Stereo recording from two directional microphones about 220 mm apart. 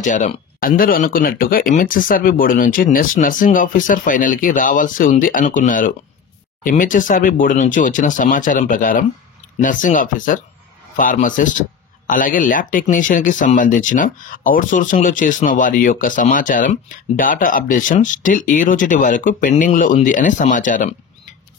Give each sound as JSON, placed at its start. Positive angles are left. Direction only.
{"t": 0.0, "sound": "speech", "side_deg": 35}